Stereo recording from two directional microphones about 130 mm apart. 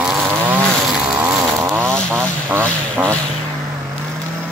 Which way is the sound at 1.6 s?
20° right (ahead or behind).